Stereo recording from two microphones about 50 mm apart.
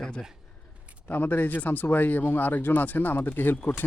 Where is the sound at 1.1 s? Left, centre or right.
Left.